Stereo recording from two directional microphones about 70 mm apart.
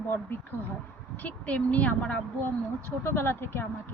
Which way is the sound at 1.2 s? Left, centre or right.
Centre.